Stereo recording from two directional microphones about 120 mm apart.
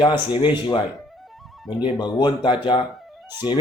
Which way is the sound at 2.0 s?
40° left (ahead or behind).